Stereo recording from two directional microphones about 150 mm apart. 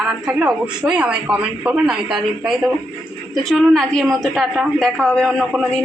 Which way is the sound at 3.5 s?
Centre (ahead or behind).